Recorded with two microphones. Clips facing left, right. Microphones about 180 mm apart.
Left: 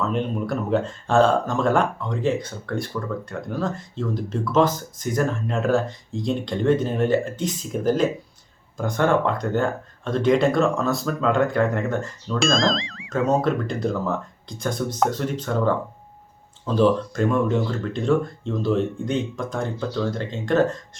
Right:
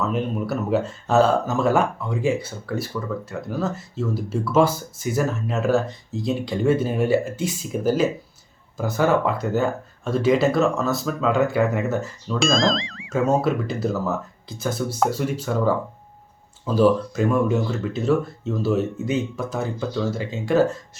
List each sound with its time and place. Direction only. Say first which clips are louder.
0.0 s speech: even; 5° right (ahead or behind)